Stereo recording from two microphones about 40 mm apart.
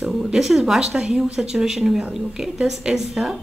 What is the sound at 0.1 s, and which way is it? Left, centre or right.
A woman's voice, centre.